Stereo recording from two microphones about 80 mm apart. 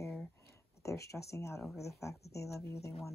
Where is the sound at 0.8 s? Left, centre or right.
Left.